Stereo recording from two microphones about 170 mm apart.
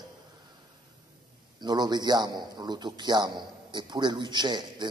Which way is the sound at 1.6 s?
25° right (ahead or behind).